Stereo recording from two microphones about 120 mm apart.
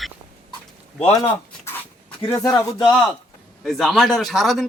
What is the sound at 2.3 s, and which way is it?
Speech, 25° left (ahead or behind).